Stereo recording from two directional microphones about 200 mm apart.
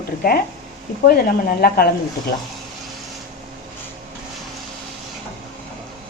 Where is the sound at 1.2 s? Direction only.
50° left (ahead or behind).